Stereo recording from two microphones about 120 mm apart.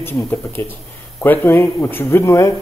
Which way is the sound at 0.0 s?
20° left (ahead or behind).